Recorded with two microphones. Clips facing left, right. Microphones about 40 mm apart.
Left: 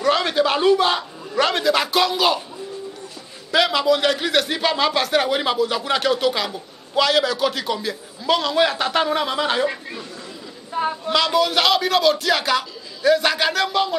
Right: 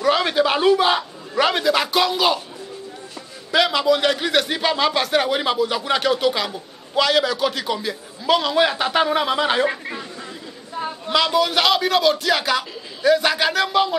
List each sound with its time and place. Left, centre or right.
0.0 s a sound: centre
3.5 s a man's voice: centre
10.8 s speech: centre
11.1 s a man's voice: centre